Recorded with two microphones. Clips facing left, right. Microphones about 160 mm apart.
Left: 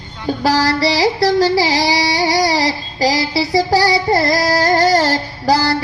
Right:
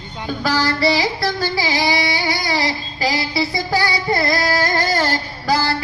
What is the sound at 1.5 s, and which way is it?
Singing, 35° left (ahead or behind).